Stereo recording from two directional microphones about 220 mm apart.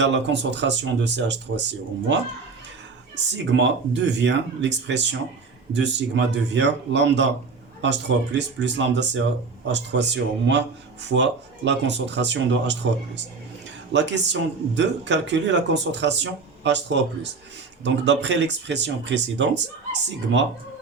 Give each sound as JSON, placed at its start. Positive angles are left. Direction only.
{"t": 0.0, "sound": "speech", "side_deg": -55}
{"t": 3.3, "sound": "speech", "side_deg": -55}
{"t": 13.9, "sound": "speech", "side_deg": -55}